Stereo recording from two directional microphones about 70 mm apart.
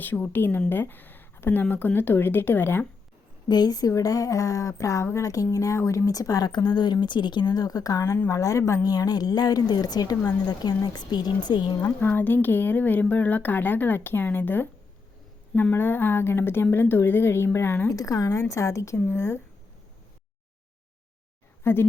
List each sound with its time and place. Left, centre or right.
0.0 s speech: left
3.5 s a woman's voice: left
6.1 s a woman's voice: left
8.8 s a woman's voice: left
11.9 s speech: left
15.7 s a woman's voice: left
17.9 s a woman's voice: left
18.9 s a woman's voice: left
21.6 s speech: left